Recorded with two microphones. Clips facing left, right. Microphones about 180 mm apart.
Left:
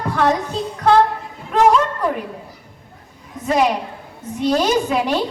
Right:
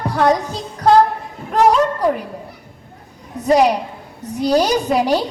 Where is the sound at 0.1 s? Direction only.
35° right (ahead or behind).